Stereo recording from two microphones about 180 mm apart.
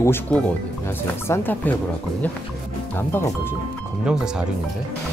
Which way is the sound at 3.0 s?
10° left (ahead or behind).